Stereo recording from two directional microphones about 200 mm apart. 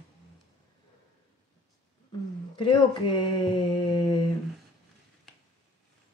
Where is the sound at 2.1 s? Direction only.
20° left (ahead or behind).